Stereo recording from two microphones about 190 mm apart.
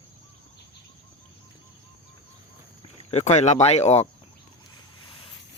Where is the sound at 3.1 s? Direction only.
35° left (ahead or behind).